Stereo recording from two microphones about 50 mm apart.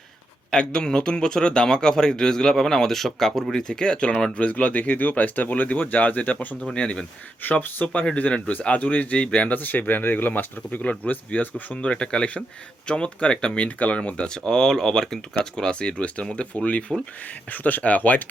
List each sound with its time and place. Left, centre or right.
0.5 s a man's voice: centre; by 6.6 s left
6.7 s speech: centre
7.4 s speech: left
9.5 s speech: left
16.9 s a man's voice: centre
17.5 s speech: left